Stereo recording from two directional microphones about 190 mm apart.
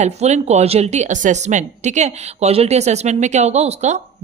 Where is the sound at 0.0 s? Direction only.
35° right (ahead or behind).